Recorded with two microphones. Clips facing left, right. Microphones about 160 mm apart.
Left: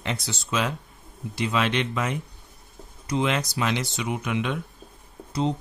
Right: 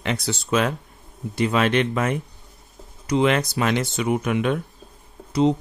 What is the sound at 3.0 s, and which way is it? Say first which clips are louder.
Speech: right 5 dB; 70° right (ahead or behind).